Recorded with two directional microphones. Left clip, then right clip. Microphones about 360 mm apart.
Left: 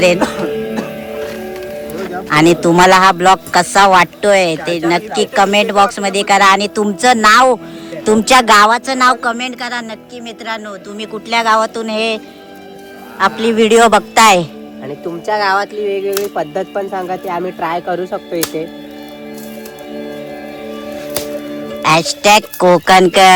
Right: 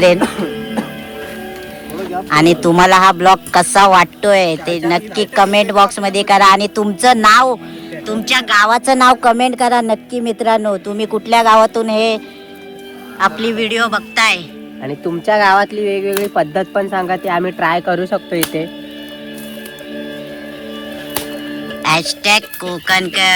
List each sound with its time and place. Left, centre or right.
0.0 s a man's voice: centre
2.3 s a man's voice: centre
8.0 s speech: centre
8.6 s a man's voice: centre
13.4 s speech: centre
14.8 s speech: right
21.8 s speech: centre